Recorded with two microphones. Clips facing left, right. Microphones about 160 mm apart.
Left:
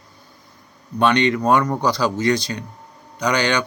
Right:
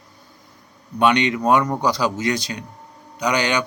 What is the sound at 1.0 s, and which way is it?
Speech, 15° right (ahead or behind).